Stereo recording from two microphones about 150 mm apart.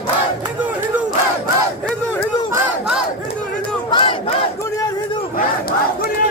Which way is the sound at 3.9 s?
35° left (ahead or behind).